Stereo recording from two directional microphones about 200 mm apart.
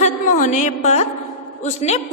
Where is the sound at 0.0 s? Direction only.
40° left (ahead or behind).